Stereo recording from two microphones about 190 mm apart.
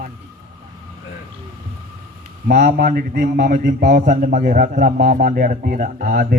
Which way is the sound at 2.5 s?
50° right (ahead or behind).